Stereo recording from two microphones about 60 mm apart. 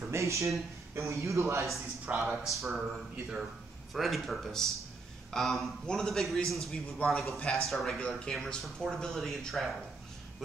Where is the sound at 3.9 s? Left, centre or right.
Centre.